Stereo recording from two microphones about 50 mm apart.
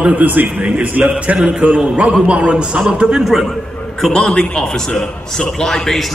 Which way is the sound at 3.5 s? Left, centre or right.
Centre.